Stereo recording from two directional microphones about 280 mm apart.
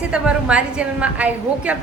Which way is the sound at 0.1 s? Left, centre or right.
Centre.